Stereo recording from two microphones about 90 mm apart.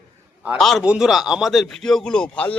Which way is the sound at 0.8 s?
10° right (ahead or behind).